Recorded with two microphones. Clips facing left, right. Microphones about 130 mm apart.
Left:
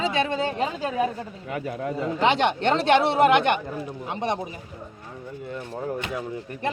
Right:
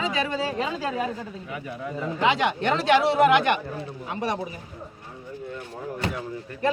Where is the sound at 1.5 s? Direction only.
55° left (ahead or behind).